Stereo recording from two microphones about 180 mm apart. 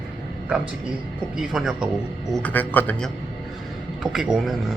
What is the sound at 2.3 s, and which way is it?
Speech, 10° left (ahead or behind).